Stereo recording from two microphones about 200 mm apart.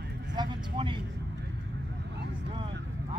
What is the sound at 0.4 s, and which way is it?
Vehicle, 25° right (ahead or behind).